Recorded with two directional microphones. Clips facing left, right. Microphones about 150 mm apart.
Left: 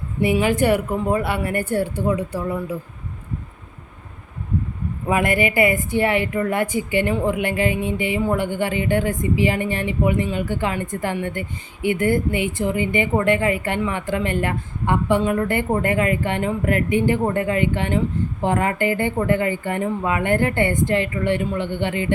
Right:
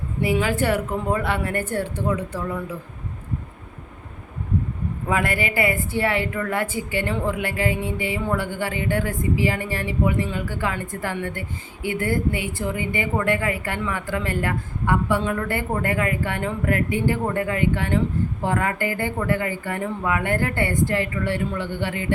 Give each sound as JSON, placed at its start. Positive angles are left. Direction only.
{"t": 0.2, "sound": "a woman's voice", "side_deg": 20}
{"t": 5.0, "sound": "a woman's voice", "side_deg": 15}